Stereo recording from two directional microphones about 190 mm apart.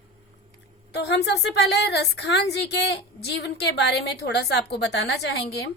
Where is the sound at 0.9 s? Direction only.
65° left (ahead or behind).